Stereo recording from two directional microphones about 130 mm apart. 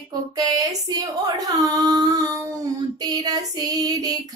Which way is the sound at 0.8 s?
30° right (ahead or behind).